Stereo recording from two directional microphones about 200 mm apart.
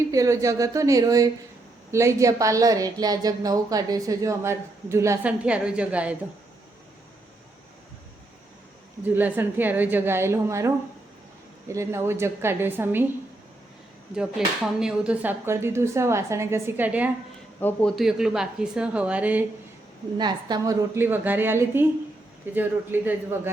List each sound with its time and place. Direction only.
0.1 s a woman's voice: 15° right (ahead or behind)
9.0 s a woman's voice: 10° right (ahead or behind)
11.7 s a woman's voice: 15° right (ahead or behind)
14.2 s a woman's voice: 5° right (ahead or behind)
17.6 s a man's voice: 10° left (ahead or behind)
17.9 s a woman's voice: centre (ahead or behind)
20.1 s a woman's voice: 20° right (ahead or behind)